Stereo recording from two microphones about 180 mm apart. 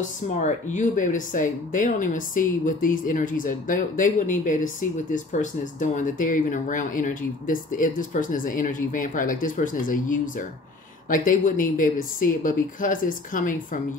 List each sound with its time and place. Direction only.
0.3 s speech: 40° left (ahead or behind)